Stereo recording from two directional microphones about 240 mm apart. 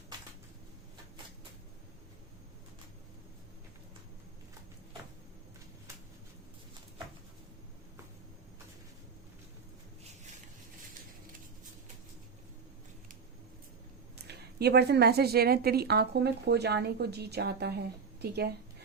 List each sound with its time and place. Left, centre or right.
14.3 s a woman's voice: right